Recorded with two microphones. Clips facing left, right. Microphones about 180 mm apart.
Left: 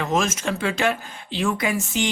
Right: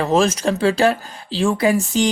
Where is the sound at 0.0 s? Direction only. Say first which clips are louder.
Right 6 dB; 35° right (ahead or behind).